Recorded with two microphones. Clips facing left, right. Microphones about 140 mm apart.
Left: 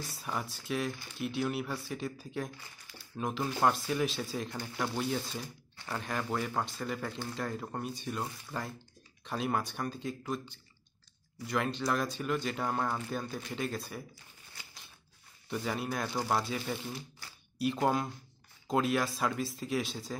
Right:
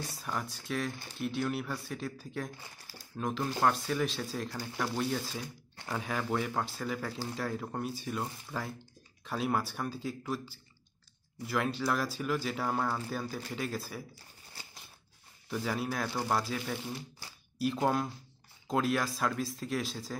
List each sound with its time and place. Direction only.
0.0 s speech: centre (ahead or behind)
14.6 s scissors: 30° right (ahead or behind)
15.5 s speech: centre (ahead or behind)